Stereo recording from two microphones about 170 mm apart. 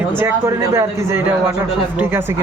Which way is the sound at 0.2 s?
15° right (ahead or behind).